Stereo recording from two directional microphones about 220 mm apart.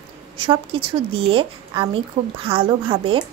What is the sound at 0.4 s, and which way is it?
A woman's voice, 20° right (ahead or behind).